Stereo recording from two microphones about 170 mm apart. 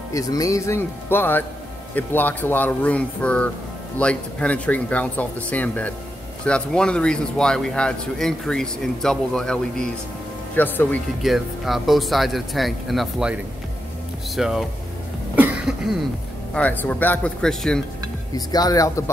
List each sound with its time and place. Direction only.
0.1 s speech: 20° left (ahead or behind)
11.2 s speech: centre (ahead or behind)
15.3 s cough: 10° right (ahead or behind)
16.5 s speech: 10° left (ahead or behind)
18.3 s speech: 20° left (ahead or behind)